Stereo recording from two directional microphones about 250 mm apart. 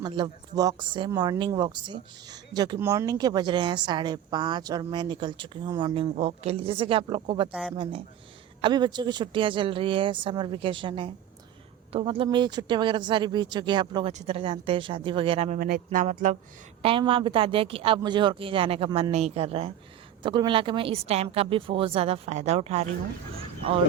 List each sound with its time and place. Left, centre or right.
0.0 s speech: centre
8.6 s speech: centre